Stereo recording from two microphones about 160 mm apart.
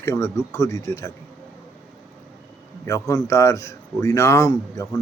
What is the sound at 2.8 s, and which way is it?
Speech, 20° left (ahead or behind).